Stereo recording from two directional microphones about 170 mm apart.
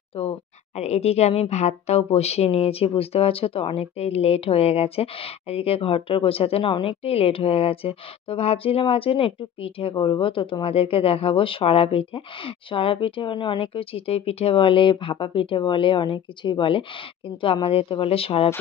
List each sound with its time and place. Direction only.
0.1 s speech: 35° left (ahead or behind)